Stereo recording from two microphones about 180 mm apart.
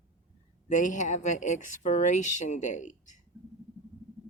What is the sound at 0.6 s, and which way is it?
Speech, 45° left (ahead or behind).